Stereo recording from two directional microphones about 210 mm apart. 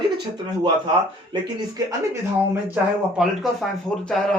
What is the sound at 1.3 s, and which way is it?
Speech, 20° right (ahead or behind).